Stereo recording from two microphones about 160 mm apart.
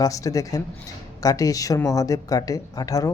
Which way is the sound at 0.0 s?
20° left (ahead or behind).